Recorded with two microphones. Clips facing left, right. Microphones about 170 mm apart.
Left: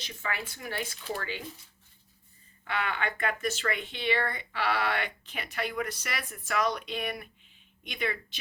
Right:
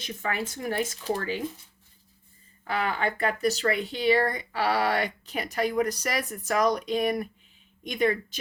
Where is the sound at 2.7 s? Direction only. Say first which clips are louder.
Right 5 dB; 35° right (ahead or behind).